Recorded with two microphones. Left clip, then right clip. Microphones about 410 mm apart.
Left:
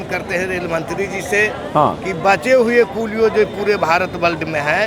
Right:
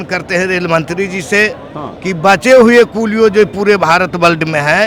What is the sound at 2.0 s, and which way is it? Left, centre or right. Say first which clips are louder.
A man's voice: right 5 dB; right.